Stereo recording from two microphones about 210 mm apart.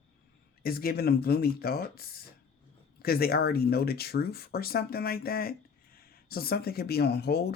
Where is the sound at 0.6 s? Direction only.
45° left (ahead or behind).